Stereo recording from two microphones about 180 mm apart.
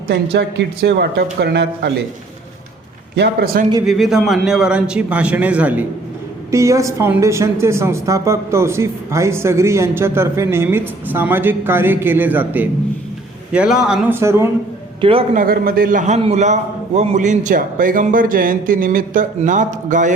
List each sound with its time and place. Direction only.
0.1 s speech: 65° right (ahead or behind)
3.2 s speech: 60° right (ahead or behind)
3.8 s a woman's voice: centre (ahead or behind)
14.2 s a woman's voice: 15° right (ahead or behind)
15.0 s a man's voice: 30° right (ahead or behind)
15.4 s a man's voice: 55° right (ahead or behind)